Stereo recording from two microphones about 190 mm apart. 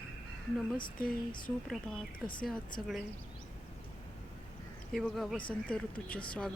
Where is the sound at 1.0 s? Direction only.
45° left (ahead or behind).